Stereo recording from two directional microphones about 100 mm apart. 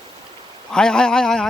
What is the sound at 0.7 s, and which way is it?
Speech, 5° left (ahead or behind).